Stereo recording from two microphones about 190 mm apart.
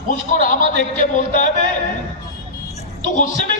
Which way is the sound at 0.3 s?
45° left (ahead or behind).